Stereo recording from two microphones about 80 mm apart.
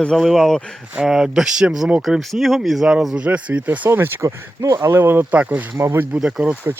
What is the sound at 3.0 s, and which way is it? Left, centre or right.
Speech, centre.